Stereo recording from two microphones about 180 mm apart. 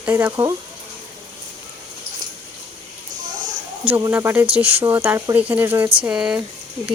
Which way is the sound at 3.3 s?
45° right (ahead or behind).